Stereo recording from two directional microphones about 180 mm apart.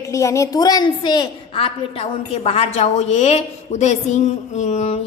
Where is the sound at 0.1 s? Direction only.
15° left (ahead or behind).